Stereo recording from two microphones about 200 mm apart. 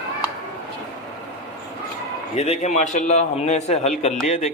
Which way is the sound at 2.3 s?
35° left (ahead or behind).